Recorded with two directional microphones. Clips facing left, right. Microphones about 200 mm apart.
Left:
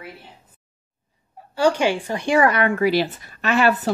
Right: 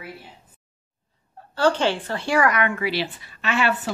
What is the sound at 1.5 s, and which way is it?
A woman's voice, 10° left (ahead or behind).